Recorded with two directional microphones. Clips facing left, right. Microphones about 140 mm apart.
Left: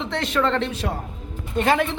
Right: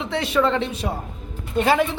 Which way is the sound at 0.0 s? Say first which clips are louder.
Right 2 dB; 10° right (ahead or behind).